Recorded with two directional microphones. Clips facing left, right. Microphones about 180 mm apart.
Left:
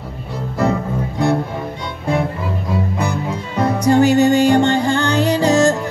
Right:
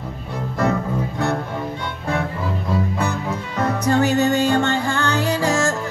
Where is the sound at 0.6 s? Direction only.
10° left (ahead or behind).